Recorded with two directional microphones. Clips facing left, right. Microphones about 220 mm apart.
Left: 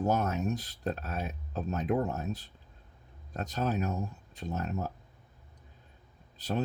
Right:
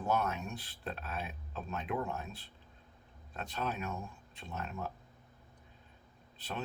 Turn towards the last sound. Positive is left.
turn(degrees=40)  # may be behind; listen again after turning